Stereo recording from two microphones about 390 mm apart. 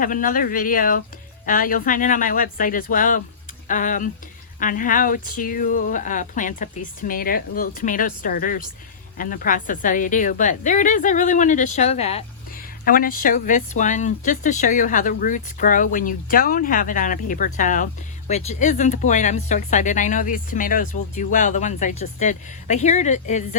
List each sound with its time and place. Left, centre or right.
0.0 s a woman's voice: left